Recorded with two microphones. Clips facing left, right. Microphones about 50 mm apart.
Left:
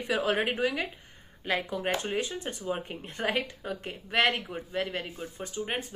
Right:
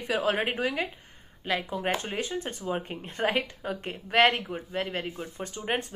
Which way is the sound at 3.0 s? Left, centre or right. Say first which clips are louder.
Right 4 dB; right.